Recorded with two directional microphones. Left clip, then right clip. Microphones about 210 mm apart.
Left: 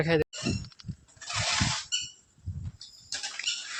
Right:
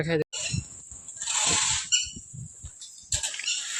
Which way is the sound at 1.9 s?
25° left (ahead or behind).